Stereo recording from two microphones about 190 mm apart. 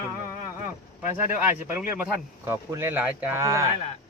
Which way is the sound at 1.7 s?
5° right (ahead or behind).